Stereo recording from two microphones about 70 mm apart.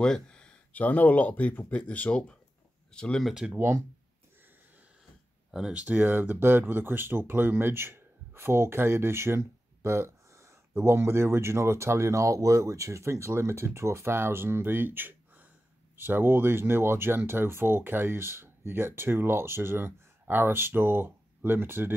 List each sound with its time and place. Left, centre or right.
0.0 s speech: centre
3.5 s speech: right
5.5 s speech: centre; by 21.9 s right